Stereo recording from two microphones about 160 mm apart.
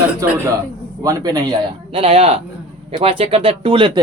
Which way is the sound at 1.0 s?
25° right (ahead or behind).